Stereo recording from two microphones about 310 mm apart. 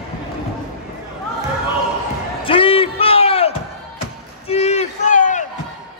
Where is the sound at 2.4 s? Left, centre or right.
Centre.